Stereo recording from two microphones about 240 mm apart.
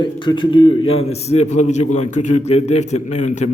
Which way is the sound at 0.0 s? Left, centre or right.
Centre.